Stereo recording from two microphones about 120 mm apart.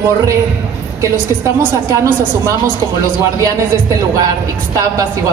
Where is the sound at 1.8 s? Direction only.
25° right (ahead or behind).